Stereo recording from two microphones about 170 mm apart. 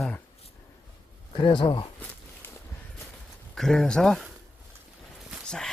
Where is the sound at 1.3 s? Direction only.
30° left (ahead or behind).